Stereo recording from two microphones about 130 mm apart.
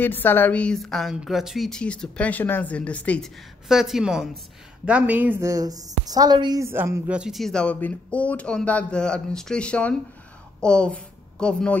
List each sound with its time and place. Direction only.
0.0 s speech: 15° left (ahead or behind)
3.6 s a woman's voice: 5° right (ahead or behind)
5.4 s a woman's voice: 25° right (ahead or behind)
6.6 s a woman's voice: 20° right (ahead or behind); by 11.8 s 5° left (ahead or behind)